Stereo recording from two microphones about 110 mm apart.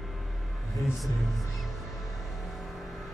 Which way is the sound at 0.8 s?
Centre (ahead or behind).